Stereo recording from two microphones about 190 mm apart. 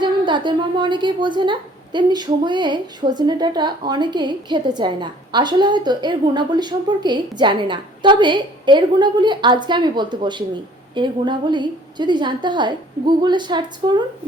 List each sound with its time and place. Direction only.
0.0 s a woman's voice: 25° right (ahead or behind)